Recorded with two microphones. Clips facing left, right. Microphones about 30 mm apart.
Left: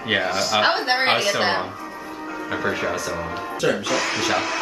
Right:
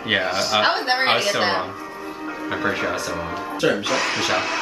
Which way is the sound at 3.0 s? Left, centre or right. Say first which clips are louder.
Even; centre.